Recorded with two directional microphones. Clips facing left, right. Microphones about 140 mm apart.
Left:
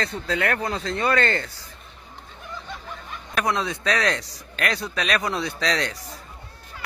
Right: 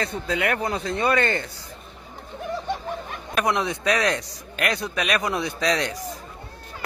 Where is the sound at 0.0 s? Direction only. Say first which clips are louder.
Even; 15° right (ahead or behind).